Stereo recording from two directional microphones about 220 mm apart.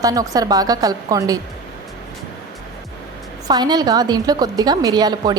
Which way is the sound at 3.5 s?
20° right (ahead or behind).